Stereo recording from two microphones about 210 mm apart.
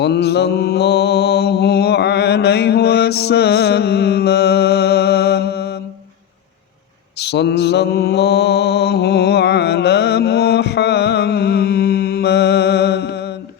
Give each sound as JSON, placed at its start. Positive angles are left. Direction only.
{"t": 0.0, "sound": "mantra", "side_deg": 50}
{"t": 7.2, "sound": "mantra", "side_deg": 55}